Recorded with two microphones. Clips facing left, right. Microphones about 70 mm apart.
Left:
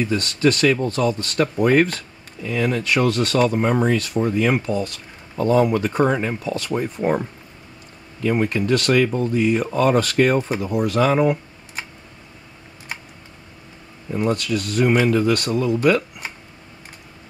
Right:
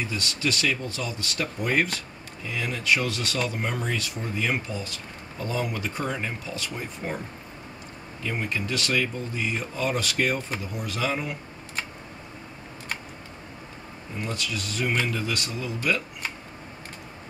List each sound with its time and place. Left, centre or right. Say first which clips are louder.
0.0 s speech: left 10 dB; left
8.2 s speech: left 10 dB; left
14.1 s speech: left 11 dB; left